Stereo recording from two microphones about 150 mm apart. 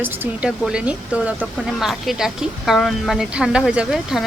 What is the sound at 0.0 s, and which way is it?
Speech, 15° right (ahead or behind).